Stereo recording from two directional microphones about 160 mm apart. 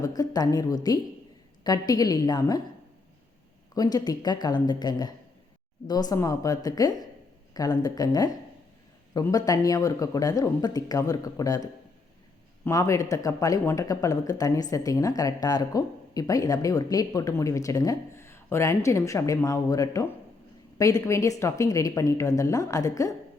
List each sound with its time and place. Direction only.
0.0 s speech: 25° left (ahead or behind)
3.8 s speech: 25° left (ahead or behind)